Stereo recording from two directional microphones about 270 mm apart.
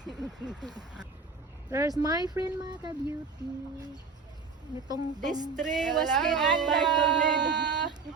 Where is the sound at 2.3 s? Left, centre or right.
Centre.